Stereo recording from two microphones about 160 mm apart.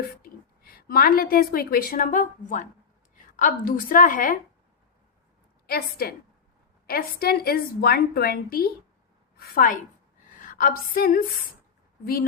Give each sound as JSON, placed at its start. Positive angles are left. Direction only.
{"t": 0.2, "sound": "a woman's voice", "side_deg": 65}
{"t": 5.6, "sound": "a woman's voice", "side_deg": 70}